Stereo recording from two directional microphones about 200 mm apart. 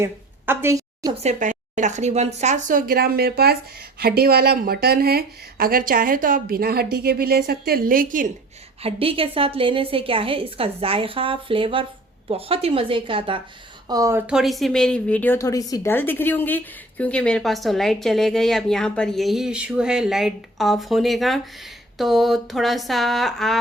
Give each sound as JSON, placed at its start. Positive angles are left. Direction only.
{"t": 0.0, "sound": "a sound", "side_deg": -15}
{"t": 1.1, "sound": "speech", "side_deg": -35}
{"t": 8.8, "sound": "a woman's voice", "side_deg": -30}